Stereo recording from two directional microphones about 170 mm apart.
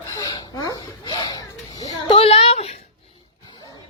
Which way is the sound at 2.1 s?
35° left (ahead or behind).